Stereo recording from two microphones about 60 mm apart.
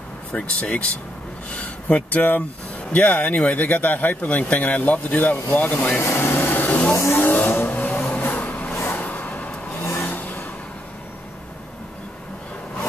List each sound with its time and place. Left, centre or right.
0.3 s speech: centre
5.8 s air conditioning: left
6.9 s vehicle: left